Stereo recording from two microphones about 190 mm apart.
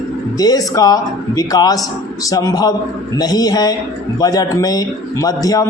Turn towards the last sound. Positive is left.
turn(degrees=20)  # may be behind; listen again after turning